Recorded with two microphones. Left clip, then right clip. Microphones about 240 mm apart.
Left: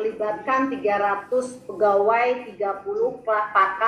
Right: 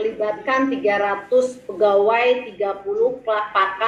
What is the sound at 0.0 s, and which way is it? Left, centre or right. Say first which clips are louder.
A woman's voice: right 3 dB; right.